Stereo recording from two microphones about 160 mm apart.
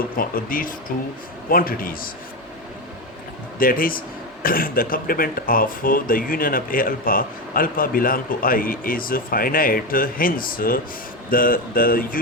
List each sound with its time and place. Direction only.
0.2 s speech: 60° left (ahead or behind)
3.6 s speech: 60° left (ahead or behind)